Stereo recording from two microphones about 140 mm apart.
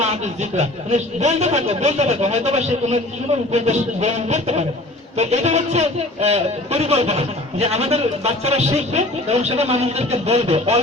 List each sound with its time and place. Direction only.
0.5 s speech: 55° right (ahead or behind)